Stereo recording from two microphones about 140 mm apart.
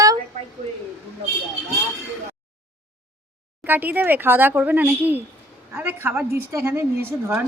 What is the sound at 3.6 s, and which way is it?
A woman's voice, 15° right (ahead or behind).